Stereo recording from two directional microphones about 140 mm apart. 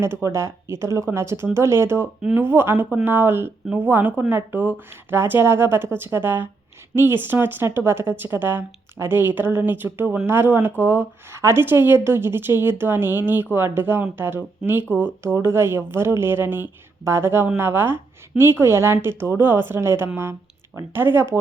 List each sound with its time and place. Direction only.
0.0 s speech: 20° right (ahead or behind)